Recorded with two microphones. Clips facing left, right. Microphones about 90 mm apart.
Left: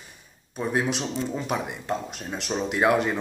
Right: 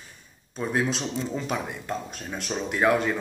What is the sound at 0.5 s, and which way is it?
Speech, 10° left (ahead or behind).